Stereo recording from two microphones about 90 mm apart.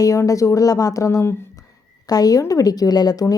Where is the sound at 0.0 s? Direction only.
40° left (ahead or behind).